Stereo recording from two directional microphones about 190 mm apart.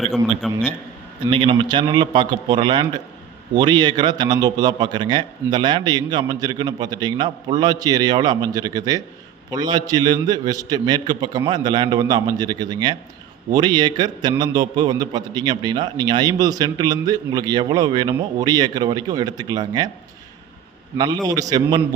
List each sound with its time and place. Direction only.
0.4 s a man's voice: 5° left (ahead or behind)
1.3 s a man's voice: 30° right (ahead or behind)
21.0 s a man's voice: 20° right (ahead or behind)